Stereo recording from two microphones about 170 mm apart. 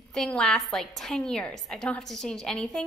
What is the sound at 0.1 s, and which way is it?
A woman's voice, 5° left (ahead or behind).